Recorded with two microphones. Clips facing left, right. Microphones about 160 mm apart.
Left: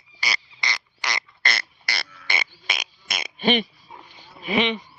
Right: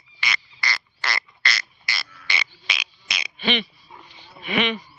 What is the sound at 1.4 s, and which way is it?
Frog, 60° left (ahead or behind).